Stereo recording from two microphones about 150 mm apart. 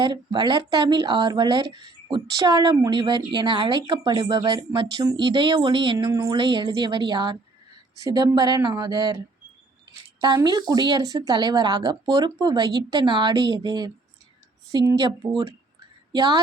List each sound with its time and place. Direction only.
0.0 s speech: 30° right (ahead or behind)
6.1 s speech: 20° right (ahead or behind)
6.3 s speech: 30° right (ahead or behind)